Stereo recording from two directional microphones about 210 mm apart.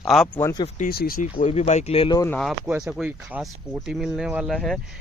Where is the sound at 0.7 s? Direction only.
45° left (ahead or behind).